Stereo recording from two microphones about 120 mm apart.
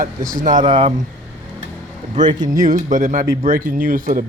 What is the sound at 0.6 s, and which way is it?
Speech, 50° right (ahead or behind).